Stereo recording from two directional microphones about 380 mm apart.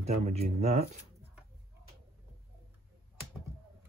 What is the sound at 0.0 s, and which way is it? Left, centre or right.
Speech, centre.